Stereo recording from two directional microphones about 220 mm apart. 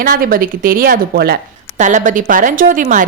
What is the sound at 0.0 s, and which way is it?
A woman's voice, 40° right (ahead or behind).